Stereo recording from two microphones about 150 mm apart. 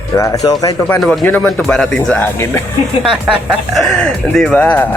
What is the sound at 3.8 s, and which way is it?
Speech, centre (ahead or behind).